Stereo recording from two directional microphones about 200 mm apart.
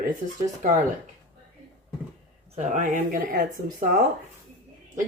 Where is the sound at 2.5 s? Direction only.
40° right (ahead or behind).